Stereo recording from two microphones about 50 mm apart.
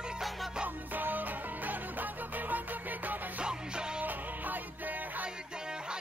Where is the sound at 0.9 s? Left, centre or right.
Right.